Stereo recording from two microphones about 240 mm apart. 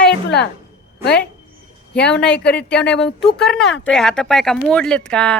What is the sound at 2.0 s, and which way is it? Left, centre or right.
Speech, centre.